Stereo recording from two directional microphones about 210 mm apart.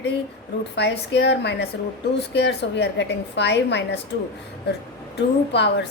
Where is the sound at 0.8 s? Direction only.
55° left (ahead or behind).